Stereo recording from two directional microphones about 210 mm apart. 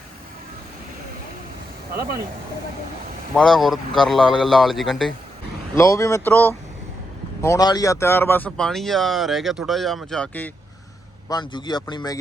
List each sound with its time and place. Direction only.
3.3 s speech: centre (ahead or behind)
5.7 s speech: 15° left (ahead or behind)
11.3 s speech: 20° left (ahead or behind)